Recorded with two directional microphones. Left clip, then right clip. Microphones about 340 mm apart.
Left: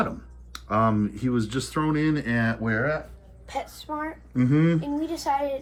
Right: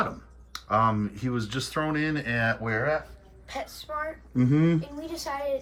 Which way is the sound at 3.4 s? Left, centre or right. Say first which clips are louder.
Left 3 dB; left.